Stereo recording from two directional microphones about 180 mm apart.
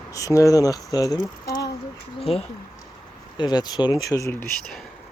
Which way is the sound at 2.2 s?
35° left (ahead or behind).